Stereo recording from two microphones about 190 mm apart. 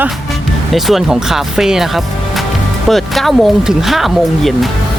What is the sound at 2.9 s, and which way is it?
Speech, centre (ahead or behind).